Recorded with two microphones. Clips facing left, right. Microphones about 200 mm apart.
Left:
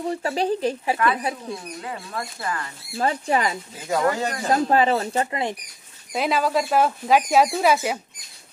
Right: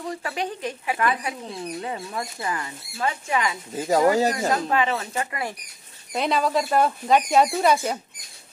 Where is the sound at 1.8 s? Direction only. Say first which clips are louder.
Right 2 dB; 20° right (ahead or behind).